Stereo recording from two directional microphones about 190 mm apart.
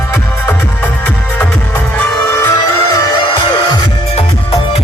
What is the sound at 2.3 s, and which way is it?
Music, 15° left (ahead or behind).